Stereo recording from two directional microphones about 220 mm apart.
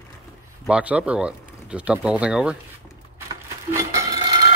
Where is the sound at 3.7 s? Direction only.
15° right (ahead or behind).